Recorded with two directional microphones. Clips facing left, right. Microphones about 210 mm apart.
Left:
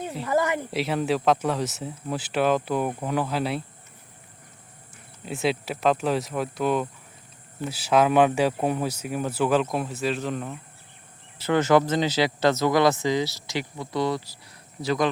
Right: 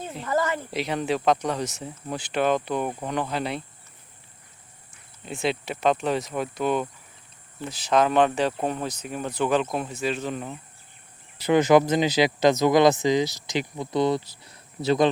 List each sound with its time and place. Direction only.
0.3 s speech: 15° left (ahead or behind)
0.7 s speech: 5° left (ahead or behind)
5.2 s speech: 5° left (ahead or behind)
11.3 s speech: 15° right (ahead or behind)